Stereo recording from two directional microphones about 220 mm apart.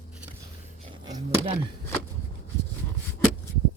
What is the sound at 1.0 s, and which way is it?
Speech, 20° right (ahead or behind).